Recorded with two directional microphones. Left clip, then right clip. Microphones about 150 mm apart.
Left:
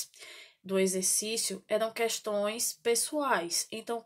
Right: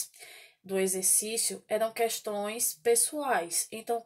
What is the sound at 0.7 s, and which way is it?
Speech, 35° left (ahead or behind).